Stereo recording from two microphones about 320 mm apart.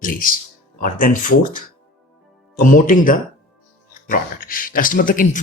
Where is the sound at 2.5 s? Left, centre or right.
Left.